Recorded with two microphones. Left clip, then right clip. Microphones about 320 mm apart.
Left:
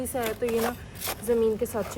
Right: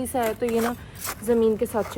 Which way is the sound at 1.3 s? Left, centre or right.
Centre.